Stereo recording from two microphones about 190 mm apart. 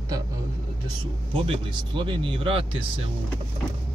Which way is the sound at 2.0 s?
25° right (ahead or behind).